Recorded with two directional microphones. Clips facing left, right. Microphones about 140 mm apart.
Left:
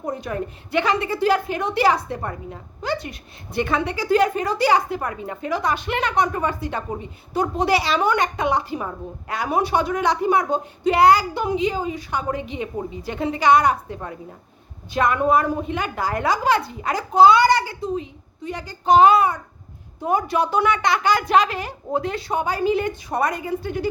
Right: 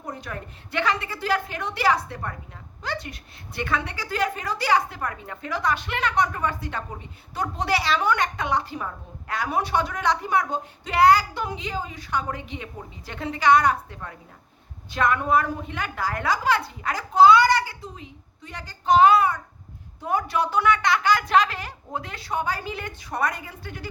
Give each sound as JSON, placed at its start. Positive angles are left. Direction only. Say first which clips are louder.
{"t": 0.1, "sound": "a woman's voice", "louder": "left 8 dB", "side_deg": 20}